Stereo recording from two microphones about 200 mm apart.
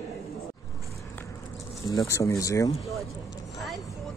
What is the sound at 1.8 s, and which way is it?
Speech, 15° left (ahead or behind).